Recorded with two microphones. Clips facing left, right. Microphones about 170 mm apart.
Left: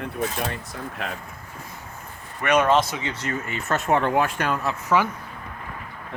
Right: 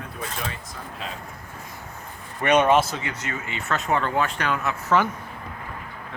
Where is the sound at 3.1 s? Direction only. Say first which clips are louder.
Left 3 dB; 35° left (ahead or behind).